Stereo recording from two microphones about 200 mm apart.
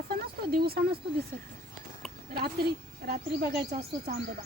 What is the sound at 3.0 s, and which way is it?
A woman's voice, 50° right (ahead or behind).